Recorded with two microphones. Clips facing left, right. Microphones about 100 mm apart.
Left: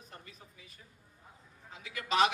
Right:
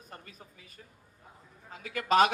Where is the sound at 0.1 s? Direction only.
45° right (ahead or behind).